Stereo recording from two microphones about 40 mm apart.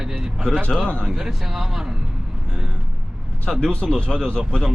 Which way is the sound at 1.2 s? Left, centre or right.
Centre.